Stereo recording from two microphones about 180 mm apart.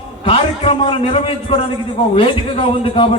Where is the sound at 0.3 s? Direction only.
30° left (ahead or behind).